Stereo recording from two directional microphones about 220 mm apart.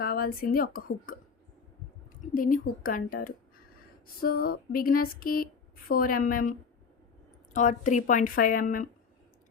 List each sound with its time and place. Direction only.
0.0 s speech: 40° left (ahead or behind)
2.3 s speech: 40° left (ahead or behind)